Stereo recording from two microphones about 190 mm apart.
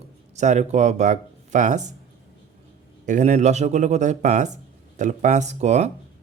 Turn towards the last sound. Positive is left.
turn(degrees=-35)  # may be behind; listen again after turning